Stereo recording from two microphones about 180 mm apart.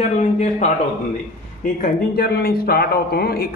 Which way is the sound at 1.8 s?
55° left (ahead or behind).